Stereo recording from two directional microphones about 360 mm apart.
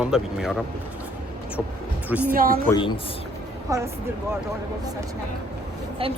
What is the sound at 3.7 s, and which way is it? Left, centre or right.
Speech, centre.